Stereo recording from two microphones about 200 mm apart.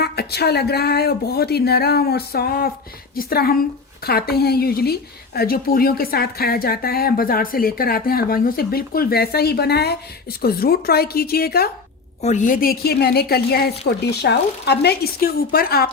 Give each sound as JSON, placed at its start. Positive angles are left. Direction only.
{"t": 0.0, "sound": "a woman's voice", "side_deg": 55}
{"t": 12.2, "sound": "a woman's voice", "side_deg": 40}